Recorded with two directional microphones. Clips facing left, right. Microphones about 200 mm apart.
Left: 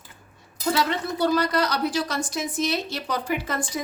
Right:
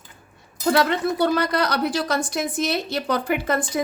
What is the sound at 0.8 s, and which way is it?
A woman's voice, 60° right (ahead or behind).